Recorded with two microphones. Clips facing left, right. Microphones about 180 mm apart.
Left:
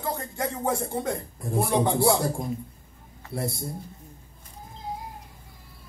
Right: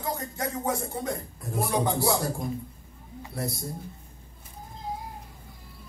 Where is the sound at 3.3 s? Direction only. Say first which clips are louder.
Left 3 dB; 30° left (ahead or behind).